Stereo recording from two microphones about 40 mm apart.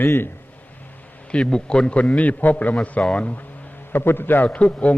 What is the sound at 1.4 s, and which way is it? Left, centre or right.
Speech, centre.